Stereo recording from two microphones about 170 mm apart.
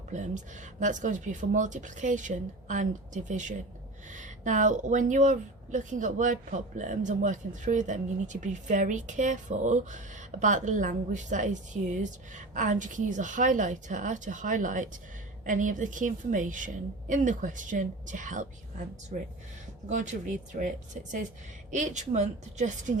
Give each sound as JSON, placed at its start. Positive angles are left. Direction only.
{"t": 0.1, "sound": "speech", "side_deg": -45}